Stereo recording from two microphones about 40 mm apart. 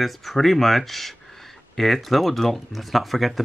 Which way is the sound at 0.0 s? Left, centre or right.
Centre.